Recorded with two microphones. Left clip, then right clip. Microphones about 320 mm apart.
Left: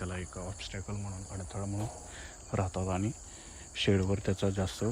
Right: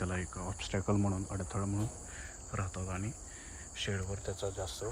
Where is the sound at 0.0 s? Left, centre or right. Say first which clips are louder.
Right 1 dB; centre.